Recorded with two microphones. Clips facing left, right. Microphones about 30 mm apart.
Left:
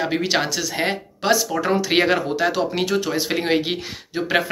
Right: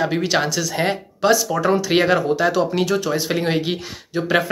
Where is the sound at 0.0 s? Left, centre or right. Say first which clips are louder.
Right 2 dB; left.